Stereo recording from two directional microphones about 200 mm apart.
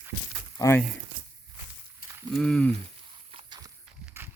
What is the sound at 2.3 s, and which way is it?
Speech, 5° left (ahead or behind).